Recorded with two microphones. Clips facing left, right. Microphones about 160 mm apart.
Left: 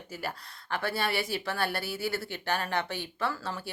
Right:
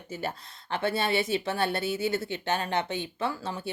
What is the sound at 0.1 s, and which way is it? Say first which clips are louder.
A woman's voice: right 4 dB; 25° right (ahead or behind).